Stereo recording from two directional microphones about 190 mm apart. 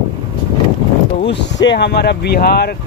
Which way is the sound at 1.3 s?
70° left (ahead or behind).